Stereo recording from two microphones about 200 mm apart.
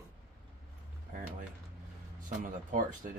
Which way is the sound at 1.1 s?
40° right (ahead or behind).